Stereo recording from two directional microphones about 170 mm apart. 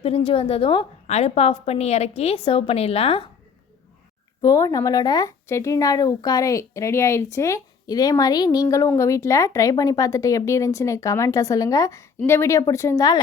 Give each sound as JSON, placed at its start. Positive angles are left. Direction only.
{"t": 0.0, "sound": "a woman's voice", "side_deg": 35}
{"t": 4.4, "sound": "speech", "side_deg": 20}